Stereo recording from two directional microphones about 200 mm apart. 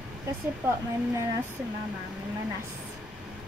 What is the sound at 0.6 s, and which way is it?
Speech, 10° right (ahead or behind).